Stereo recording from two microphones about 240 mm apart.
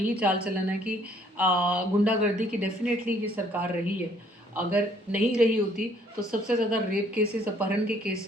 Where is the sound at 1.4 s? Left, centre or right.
Centre.